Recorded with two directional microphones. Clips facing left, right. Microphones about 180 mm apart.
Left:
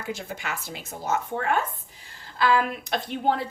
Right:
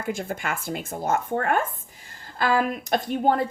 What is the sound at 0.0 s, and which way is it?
Speech, 50° right (ahead or behind).